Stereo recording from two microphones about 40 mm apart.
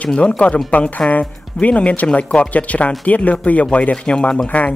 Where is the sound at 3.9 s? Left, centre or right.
Left.